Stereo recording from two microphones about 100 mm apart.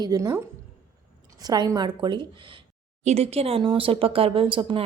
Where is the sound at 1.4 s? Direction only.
40° right (ahead or behind); by 2.6 s 60° right (ahead or behind).